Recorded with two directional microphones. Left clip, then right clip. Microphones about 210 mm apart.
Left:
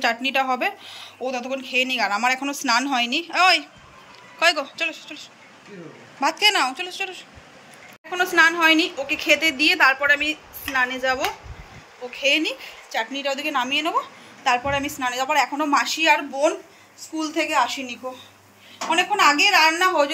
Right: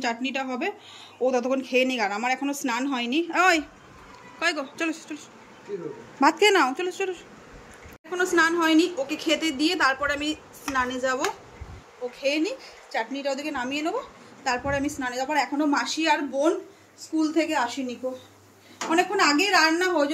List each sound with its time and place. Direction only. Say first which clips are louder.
0.0 s a woman's voice: left 7 dB; 5° right (ahead or behind)